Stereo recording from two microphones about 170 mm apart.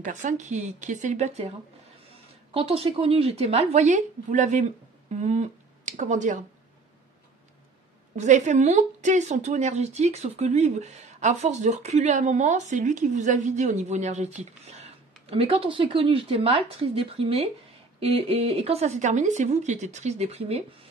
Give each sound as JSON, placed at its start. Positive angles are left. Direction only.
{"t": 0.0, "sound": "speech", "side_deg": -45}
{"t": 2.5, "sound": "a woman's voice", "side_deg": -35}
{"t": 8.2, "sound": "a woman's voice", "side_deg": -45}